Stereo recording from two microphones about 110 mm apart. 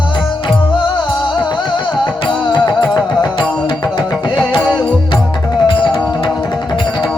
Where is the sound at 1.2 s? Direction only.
45° left (ahead or behind).